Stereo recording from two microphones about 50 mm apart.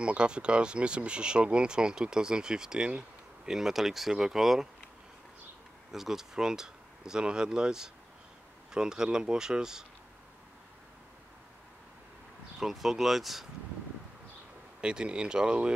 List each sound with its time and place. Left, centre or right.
0.0 s speech: right
3.4 s speech: centre
5.9 s speech: centre
12.5 s speech: centre
14.8 s speech: centre